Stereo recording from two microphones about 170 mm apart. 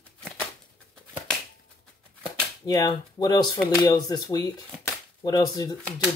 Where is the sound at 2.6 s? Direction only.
20° left (ahead or behind).